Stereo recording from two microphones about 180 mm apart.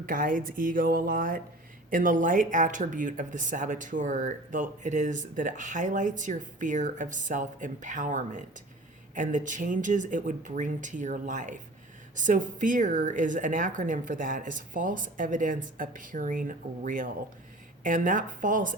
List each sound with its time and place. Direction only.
0.0 s speech: 50° right (ahead or behind)